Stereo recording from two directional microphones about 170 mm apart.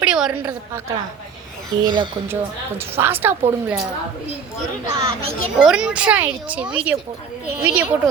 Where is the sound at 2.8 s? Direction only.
15° right (ahead or behind).